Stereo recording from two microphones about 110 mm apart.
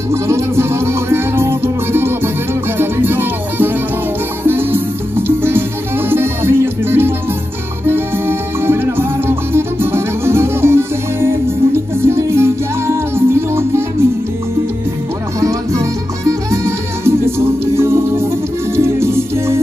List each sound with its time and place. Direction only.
0.1 s music: 25° right (ahead or behind)
15.4 s music: 30° right (ahead or behind)